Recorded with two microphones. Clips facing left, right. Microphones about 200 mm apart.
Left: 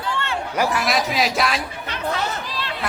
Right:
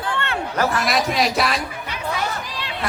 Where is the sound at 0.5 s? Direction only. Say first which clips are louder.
Even; 10° left (ahead or behind).